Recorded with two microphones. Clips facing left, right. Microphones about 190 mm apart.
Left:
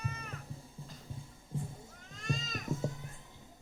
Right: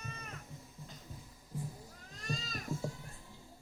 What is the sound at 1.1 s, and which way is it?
Music, 25° left (ahead or behind).